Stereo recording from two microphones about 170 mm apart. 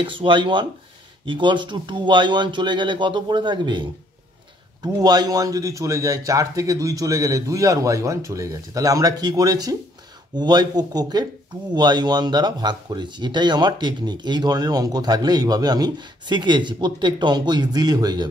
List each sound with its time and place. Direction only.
0.0 s speech: 30° right (ahead or behind)
4.8 s speech: 25° right (ahead or behind)